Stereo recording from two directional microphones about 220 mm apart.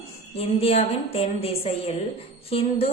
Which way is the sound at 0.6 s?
25° left (ahead or behind).